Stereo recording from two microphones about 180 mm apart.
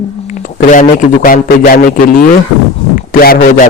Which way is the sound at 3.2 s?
50° left (ahead or behind).